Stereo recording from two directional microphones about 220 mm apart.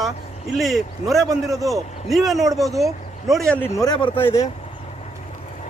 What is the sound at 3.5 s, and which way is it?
Speech, 15° left (ahead or behind).